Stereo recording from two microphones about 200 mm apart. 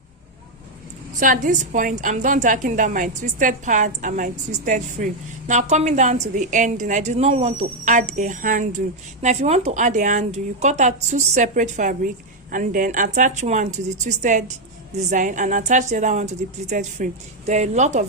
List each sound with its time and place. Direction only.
1.2 s a woman's voice: 40° right (ahead or behind)